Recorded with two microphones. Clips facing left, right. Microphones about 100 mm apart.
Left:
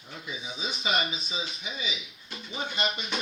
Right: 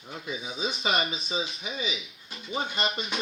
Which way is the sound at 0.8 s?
35° right (ahead or behind).